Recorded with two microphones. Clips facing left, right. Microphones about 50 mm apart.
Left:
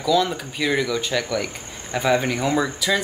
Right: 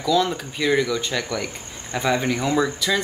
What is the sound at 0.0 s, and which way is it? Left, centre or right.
Speech, centre.